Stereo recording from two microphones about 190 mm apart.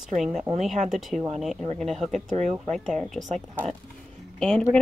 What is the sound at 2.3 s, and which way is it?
Speech, 40° right (ahead or behind).